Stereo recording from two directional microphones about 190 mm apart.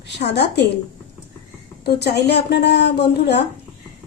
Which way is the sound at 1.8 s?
60° left (ahead or behind).